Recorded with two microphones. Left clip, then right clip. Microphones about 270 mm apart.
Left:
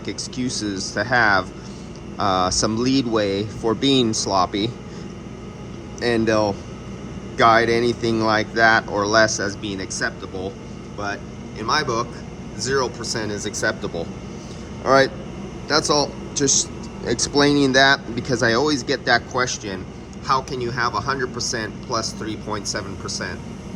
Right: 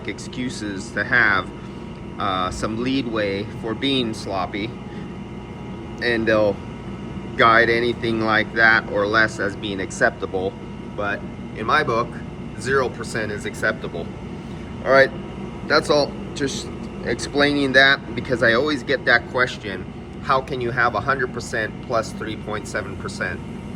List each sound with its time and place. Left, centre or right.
0.0 s speech: centre
6.0 s speech: centre